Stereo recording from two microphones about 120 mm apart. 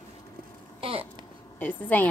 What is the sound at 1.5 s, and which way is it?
Speech, 15° left (ahead or behind).